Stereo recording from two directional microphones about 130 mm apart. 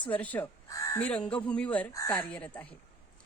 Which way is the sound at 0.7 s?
25° left (ahead or behind).